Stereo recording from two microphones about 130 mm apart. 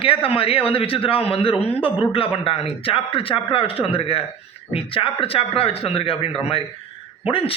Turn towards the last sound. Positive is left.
turn(degrees=45)  # may be behind; listen again after turning